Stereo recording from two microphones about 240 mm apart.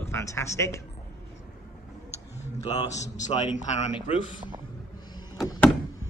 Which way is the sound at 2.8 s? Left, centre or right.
Left.